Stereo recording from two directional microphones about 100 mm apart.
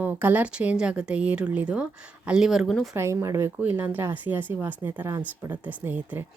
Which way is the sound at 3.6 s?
20° right (ahead or behind).